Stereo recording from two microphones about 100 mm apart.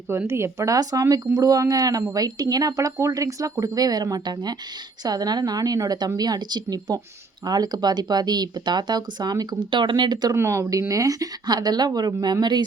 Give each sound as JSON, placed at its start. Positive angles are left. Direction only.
{"t": 0.3, "sound": "speech", "side_deg": -25}
{"t": 10.3, "sound": "speech", "side_deg": -30}